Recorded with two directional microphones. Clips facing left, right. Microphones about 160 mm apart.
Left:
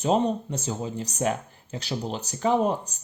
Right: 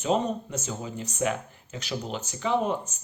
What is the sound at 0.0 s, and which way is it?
Speech, 35° left (ahead or behind).